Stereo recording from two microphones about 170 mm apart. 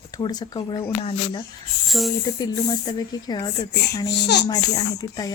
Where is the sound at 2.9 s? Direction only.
25° left (ahead or behind).